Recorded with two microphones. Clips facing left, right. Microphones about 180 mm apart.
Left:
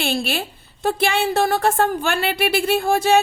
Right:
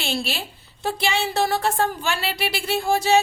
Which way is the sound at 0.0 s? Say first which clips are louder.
Left 5 dB; 55° left (ahead or behind).